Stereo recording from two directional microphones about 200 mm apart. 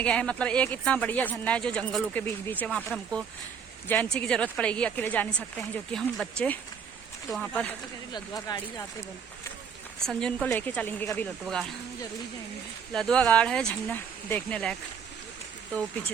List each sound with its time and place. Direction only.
0.0 s speech: 5° left (ahead or behind)
8.1 s speech: 20° left (ahead or behind)
10.1 s speech: 5° left (ahead or behind)
12.9 s speech: 5° left (ahead or behind)